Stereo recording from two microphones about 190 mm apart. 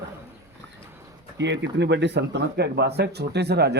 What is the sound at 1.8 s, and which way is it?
Speech, 65° right (ahead or behind).